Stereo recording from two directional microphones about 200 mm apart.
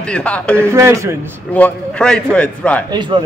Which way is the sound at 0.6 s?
15° right (ahead or behind).